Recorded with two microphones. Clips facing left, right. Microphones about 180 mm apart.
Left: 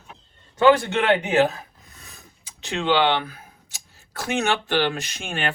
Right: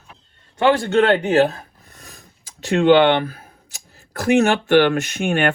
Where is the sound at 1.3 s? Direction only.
35° right (ahead or behind).